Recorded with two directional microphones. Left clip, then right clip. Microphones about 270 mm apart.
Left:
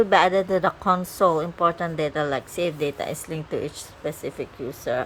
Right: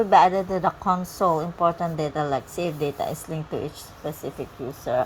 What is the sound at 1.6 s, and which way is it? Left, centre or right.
Speech, centre.